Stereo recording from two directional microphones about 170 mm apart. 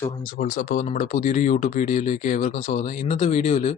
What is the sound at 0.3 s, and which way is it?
Speech, 45° left (ahead or behind).